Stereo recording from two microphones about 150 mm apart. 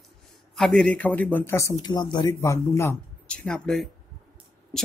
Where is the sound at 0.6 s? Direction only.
5° left (ahead or behind).